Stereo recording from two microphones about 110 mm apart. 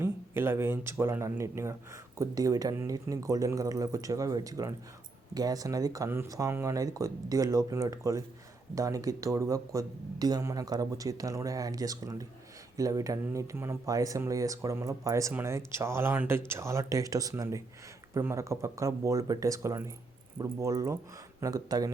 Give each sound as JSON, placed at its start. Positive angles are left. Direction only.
{"t": 0.0, "sound": "speech", "side_deg": -20}